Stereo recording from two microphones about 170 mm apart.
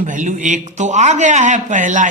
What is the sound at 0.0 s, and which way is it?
A man's voice, 50° right (ahead or behind).